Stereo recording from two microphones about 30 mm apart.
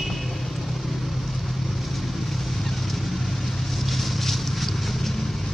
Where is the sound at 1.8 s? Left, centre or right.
Centre.